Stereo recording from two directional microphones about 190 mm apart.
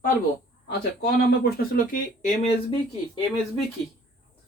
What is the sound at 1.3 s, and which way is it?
Speech, 50° left (ahead or behind).